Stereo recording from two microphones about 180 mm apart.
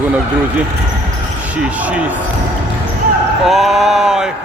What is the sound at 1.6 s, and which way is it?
Speech, 5° right (ahead or behind).